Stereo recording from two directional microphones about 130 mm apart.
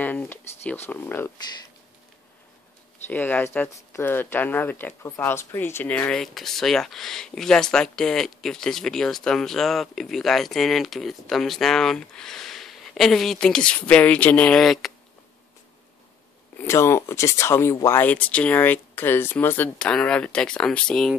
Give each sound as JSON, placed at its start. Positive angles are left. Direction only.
{"t": 0.0, "sound": "speech", "side_deg": 15}
{"t": 3.1, "sound": "speech", "side_deg": 15}
{"t": 16.6, "sound": "speech", "side_deg": 20}